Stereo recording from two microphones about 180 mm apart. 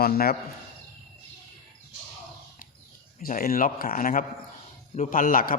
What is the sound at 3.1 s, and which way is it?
Speech, 50° left (ahead or behind).